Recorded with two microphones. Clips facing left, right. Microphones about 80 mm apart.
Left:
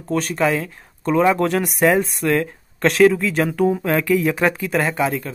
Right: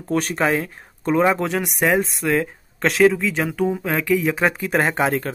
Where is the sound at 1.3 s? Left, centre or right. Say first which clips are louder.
Left 3 dB; centre.